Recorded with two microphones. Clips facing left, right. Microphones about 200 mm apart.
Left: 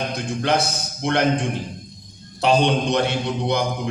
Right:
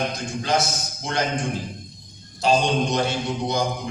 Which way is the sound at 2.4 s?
60° left (ahead or behind).